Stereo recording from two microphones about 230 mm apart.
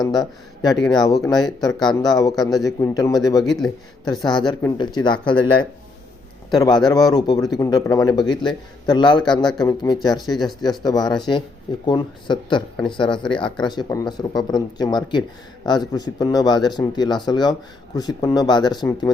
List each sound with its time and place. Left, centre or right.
0.0 s speech: centre
3.4 s speech: centre
4.2 s speech: centre
6.5 s speech: centre
9.4 s speech: centre
9.6 s speech: centre